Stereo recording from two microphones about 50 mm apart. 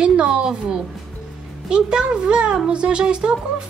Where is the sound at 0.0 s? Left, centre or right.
Centre.